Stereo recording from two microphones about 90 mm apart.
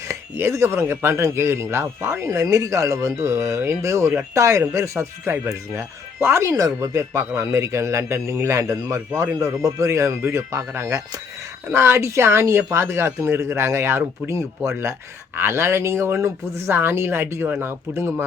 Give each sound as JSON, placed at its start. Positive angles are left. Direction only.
{"t": 0.1, "sound": "speech", "side_deg": -30}